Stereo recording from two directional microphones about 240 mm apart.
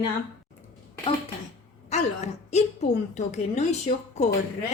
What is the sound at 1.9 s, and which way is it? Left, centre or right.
A woman's voice, left.